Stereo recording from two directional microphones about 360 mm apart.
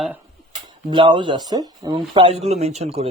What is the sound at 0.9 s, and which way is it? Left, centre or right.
Speech, centre.